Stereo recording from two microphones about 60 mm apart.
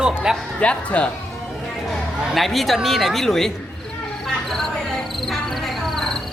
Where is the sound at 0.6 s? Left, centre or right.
Centre.